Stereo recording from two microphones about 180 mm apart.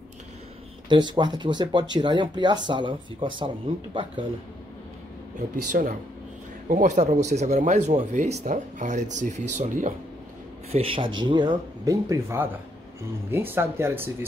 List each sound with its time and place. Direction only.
0.8 s speech: 25° right (ahead or behind)
5.7 s speech: 45° right (ahead or behind)
10.7 s speech: 30° right (ahead or behind); by 14.1 s 10° right (ahead or behind)